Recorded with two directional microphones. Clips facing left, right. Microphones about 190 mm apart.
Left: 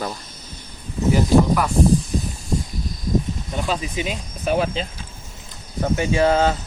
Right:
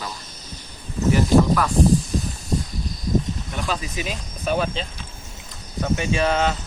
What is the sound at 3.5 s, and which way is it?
Speech, 20° left (ahead or behind).